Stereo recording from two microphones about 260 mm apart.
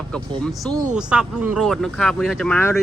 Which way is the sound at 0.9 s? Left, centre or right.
Centre.